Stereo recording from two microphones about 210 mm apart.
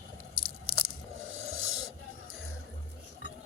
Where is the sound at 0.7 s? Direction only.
90° right.